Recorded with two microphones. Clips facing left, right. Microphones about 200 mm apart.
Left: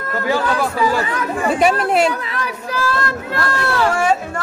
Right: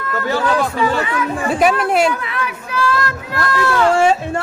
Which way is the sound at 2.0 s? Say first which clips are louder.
Right 1 dB; 35° left (ahead or behind).